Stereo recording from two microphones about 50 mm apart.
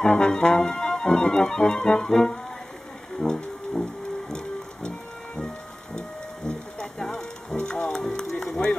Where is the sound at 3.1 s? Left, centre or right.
Centre.